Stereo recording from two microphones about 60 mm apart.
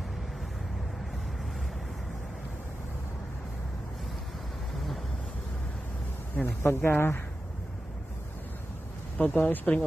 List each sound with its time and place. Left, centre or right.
6.3 s speech: left
9.2 s speech: left